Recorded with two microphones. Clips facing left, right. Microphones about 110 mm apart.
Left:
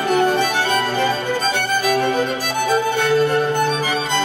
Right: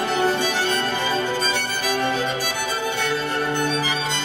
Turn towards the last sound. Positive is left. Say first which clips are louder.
# left 4 dB
turn(degrees=50)  # may be behind; listen again after turning